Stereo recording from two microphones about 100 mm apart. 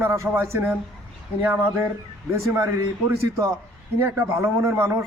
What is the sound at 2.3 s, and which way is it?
Speech, 25° right (ahead or behind).